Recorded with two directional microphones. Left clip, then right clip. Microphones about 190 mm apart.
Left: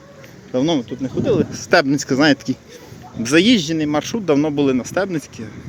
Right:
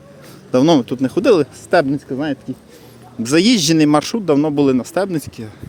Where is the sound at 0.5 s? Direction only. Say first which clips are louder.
Right 6 dB; 35° right (ahead or behind).